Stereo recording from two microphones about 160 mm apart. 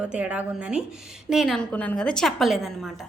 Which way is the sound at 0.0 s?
5° right (ahead or behind).